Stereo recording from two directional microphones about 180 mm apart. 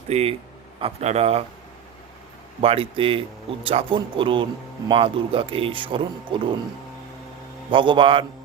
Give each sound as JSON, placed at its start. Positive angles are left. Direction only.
{"t": 0.1, "sound": "a man's voice", "side_deg": -35}
{"t": 2.6, "sound": "a man's voice", "side_deg": -30}
{"t": 7.7, "sound": "speech", "side_deg": -25}